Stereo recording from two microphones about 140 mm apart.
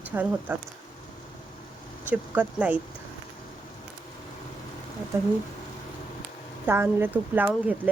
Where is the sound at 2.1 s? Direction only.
10° right (ahead or behind).